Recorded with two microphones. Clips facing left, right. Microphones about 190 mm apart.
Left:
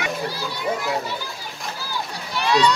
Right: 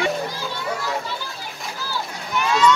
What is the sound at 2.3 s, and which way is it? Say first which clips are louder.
Run: right 1 dB; 35° left (ahead or behind).